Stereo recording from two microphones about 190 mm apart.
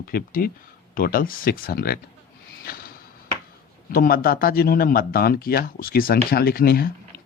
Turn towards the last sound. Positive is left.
turn(degrees=55)  # may be behind; listen again after turning